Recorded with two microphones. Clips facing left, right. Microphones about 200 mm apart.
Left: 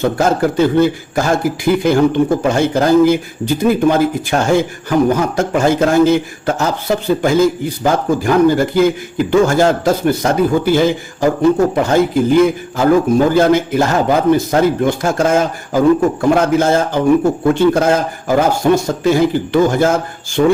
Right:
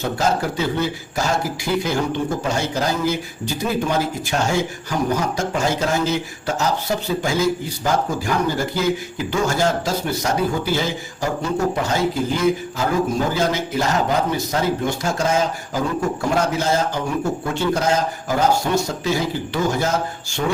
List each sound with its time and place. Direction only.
0.0 s a man's voice: 55° left (ahead or behind)